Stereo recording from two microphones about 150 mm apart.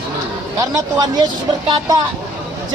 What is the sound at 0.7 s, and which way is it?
Speech, 25° right (ahead or behind).